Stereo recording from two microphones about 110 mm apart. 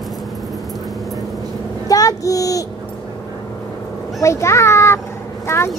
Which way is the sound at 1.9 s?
30° left (ahead or behind).